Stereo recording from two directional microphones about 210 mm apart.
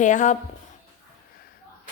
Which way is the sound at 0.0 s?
35° left (ahead or behind).